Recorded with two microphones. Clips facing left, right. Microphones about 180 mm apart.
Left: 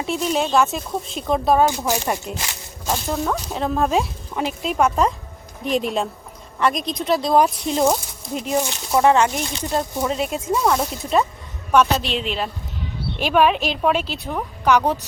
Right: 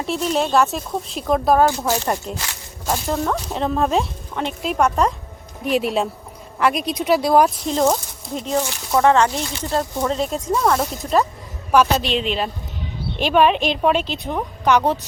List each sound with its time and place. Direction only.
0.0 s speech: centre (ahead or behind)
1.6 s speech: 15° left (ahead or behind)
2.8 s speech: 5° right (ahead or behind)
7.7 s speech: 10° left (ahead or behind)